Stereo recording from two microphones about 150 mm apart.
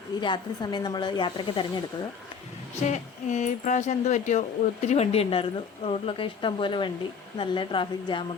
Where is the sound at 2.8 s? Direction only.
50° left (ahead or behind).